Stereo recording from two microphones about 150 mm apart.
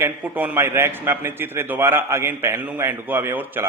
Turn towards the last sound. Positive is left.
turn(degrees=-15)  # may be behind; listen again after turning